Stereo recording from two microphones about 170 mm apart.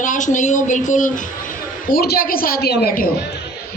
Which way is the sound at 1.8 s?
65° left (ahead or behind).